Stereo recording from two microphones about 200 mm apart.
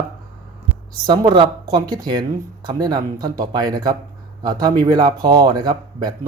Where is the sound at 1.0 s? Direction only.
20° right (ahead or behind).